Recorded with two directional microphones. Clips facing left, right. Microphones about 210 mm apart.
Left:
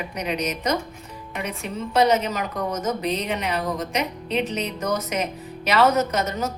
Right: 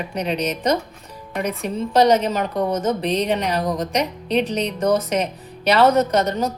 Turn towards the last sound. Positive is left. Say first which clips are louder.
# right 5 dB
turn(degrees=-35)  # may be behind; listen again after turning